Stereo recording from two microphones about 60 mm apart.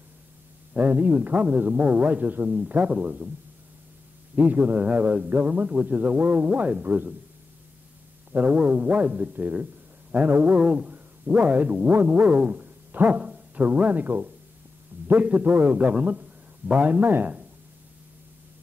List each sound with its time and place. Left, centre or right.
0.7 s a man's voice: right
4.4 s a man's voice: right
8.3 s a man's voice: right
10.1 s a sound: right
13.6 s a man's voice: right